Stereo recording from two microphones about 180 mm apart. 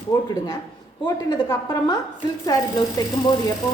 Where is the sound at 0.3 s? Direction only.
20° left (ahead or behind).